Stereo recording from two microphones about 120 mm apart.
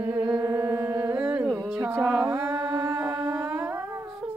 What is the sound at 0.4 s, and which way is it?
Music, 25° right (ahead or behind).